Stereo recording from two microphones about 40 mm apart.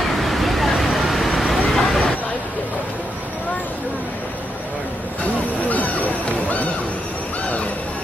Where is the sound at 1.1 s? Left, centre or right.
Centre.